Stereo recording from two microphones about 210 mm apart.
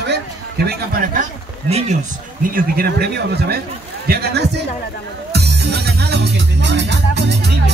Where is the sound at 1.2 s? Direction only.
30° right (ahead or behind).